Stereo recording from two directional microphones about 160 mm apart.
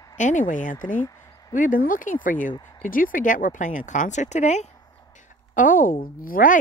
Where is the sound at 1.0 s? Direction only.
15° left (ahead or behind).